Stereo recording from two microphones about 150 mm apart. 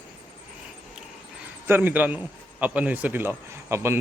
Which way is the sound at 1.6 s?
15° right (ahead or behind).